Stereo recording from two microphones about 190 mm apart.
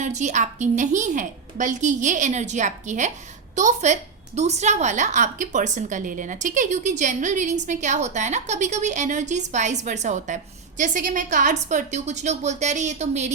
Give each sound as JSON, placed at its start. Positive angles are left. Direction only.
{"t": 0.0, "sound": "a woman's voice", "side_deg": -40}